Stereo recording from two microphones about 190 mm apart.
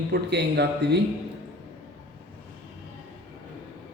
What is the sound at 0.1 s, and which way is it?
Speech, 60° right (ahead or behind).